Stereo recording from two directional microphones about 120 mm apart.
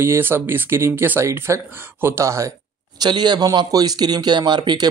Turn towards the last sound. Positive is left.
turn(degrees=-40)  # may be behind; listen again after turning